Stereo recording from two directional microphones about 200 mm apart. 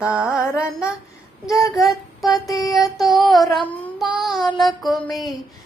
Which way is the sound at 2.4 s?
15° left (ahead or behind).